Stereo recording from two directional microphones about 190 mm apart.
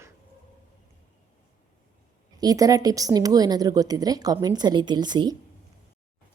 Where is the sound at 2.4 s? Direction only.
20° right (ahead or behind).